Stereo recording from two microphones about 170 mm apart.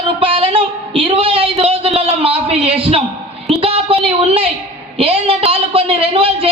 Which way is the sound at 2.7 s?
35° right (ahead or behind).